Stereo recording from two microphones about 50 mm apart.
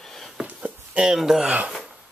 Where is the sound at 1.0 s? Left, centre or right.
Centre.